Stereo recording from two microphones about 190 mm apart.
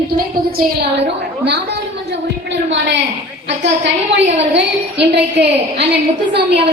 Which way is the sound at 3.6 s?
70° right (ahead or behind).